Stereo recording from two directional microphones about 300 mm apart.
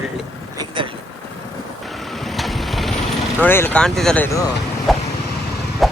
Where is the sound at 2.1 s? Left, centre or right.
Centre.